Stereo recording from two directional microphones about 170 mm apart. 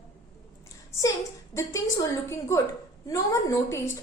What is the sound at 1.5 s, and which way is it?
Speech, 20° left (ahead or behind).